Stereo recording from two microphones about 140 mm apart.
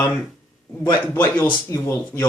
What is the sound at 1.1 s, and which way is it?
Speech, 15° left (ahead or behind).